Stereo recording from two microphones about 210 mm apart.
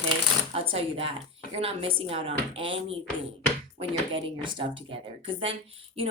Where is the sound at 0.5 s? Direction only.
25° right (ahead or behind).